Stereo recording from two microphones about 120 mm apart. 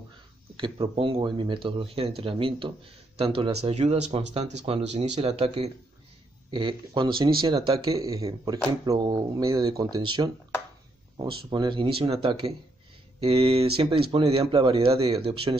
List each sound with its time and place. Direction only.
0.6 s speech: 50° right (ahead or behind)
6.5 s speech: 40° right (ahead or behind)
7.9 s speech: 30° right (ahead or behind); by 15.5 s 50° right (ahead or behind)